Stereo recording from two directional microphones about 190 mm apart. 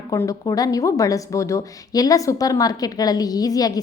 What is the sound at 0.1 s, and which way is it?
A woman's voice, 20° left (ahead or behind).